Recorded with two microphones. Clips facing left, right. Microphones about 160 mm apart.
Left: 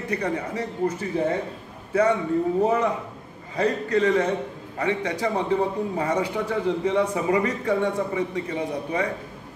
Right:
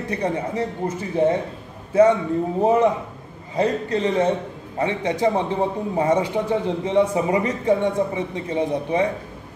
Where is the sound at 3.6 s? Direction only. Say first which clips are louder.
Right 1 dB; 25° right (ahead or behind).